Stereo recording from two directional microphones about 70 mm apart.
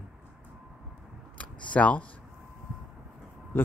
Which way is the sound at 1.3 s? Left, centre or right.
Centre.